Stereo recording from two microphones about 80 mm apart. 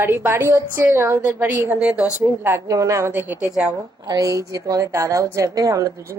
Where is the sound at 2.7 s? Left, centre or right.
Right.